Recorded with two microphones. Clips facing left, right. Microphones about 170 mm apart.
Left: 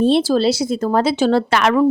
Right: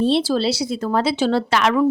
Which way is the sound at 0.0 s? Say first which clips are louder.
Left 4 dB; 45° left (ahead or behind).